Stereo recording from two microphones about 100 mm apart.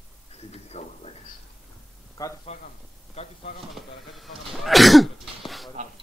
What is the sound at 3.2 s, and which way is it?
Speech, 90° left.